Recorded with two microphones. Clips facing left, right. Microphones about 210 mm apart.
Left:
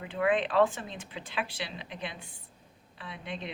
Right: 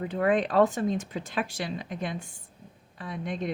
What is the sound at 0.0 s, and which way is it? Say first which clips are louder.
A woman's voice: right 3 dB; 40° right (ahead or behind).